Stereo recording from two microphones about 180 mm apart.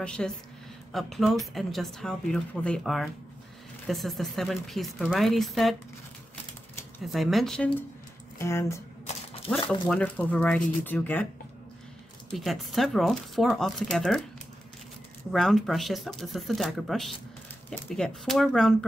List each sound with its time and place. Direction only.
0.0 s a woman's voice: 5° left (ahead or behind)
7.1 s a woman's voice: centre (ahead or behind)
8.4 s speech: 15° left (ahead or behind)
9.0 s a sound: 35° left (ahead or behind)
9.7 s speech: 5° left (ahead or behind)
12.3 s a woman's voice: centre (ahead or behind)
15.3 s a woman's voice: centre (ahead or behind)